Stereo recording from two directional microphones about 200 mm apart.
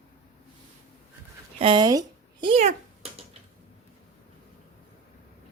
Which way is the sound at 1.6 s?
20° right (ahead or behind).